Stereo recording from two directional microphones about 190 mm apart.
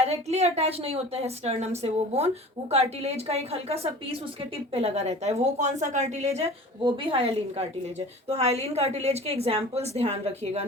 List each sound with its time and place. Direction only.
0.0 s a woman's voice: 35° right (ahead or behind)